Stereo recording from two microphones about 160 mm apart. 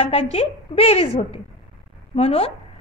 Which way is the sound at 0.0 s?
40° left (ahead or behind).